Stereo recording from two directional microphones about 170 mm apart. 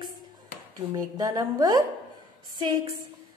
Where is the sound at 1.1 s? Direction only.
20° right (ahead or behind).